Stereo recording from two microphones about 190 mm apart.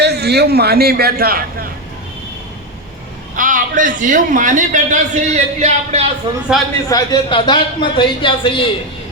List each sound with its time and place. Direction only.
0.0 s a man's voice: 60° right (ahead or behind)
3.3 s a man's voice: 45° right (ahead or behind)
6.8 s speech: 20° left (ahead or behind)